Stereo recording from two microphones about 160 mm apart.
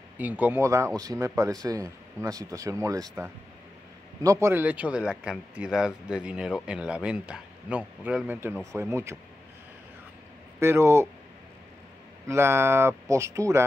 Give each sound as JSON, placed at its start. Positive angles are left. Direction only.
{"t": 0.2, "sound": "speech", "side_deg": -10}
{"t": 10.6, "sound": "speech", "side_deg": -15}
{"t": 12.3, "sound": "speech", "side_deg": -15}